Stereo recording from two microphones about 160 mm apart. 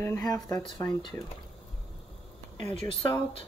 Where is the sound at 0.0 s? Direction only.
20° left (ahead or behind).